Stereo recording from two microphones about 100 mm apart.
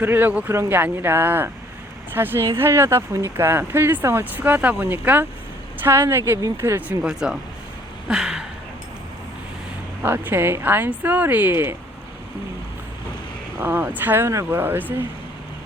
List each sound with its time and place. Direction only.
0.0 s speech: 20° right (ahead or behind)
8.0 s a sound: 5° right (ahead or behind)
10.0 s speech: 20° right (ahead or behind)
13.6 s speech: 20° right (ahead or behind)